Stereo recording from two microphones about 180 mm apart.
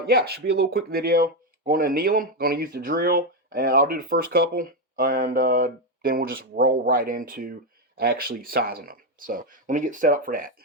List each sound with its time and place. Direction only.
0.0 s speech: 60° right (ahead or behind)